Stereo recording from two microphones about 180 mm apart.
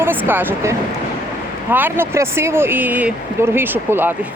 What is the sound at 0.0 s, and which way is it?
Speech, 10° right (ahead or behind).